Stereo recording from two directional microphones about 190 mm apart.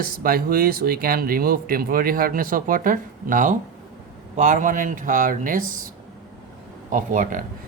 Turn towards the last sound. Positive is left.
turn(degrees=-45)  # may be behind; listen again after turning